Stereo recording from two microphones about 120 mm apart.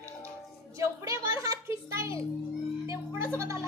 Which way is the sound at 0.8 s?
25° right (ahead or behind).